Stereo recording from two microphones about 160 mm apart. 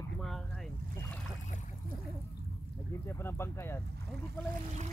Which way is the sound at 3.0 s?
15° left (ahead or behind).